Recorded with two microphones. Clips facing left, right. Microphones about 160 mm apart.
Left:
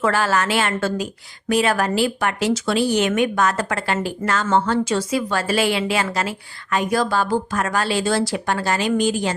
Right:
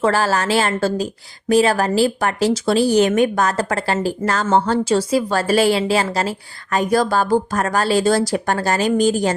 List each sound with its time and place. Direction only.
0.0 s speech: 35° right (ahead or behind)